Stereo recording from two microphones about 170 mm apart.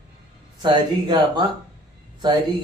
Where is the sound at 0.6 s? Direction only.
25° right (ahead or behind).